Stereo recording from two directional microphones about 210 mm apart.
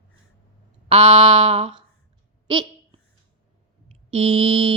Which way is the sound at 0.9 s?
25° right (ahead or behind).